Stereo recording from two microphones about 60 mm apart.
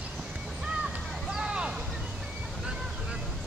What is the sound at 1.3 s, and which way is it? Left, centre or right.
Vehicle, centre.